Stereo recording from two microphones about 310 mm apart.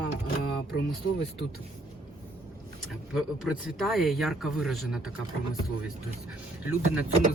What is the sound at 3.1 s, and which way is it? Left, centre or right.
Speech, centre.